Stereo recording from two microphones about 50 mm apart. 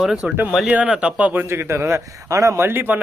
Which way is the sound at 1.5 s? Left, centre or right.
Right.